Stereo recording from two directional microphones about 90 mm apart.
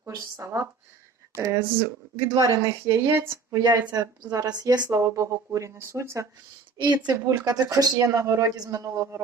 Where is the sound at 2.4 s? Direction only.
40° right (ahead or behind).